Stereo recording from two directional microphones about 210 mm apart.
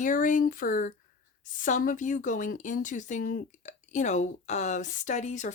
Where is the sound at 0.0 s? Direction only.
40° left (ahead or behind).